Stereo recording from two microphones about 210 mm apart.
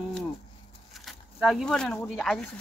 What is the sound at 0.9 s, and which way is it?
Speech, centre (ahead or behind).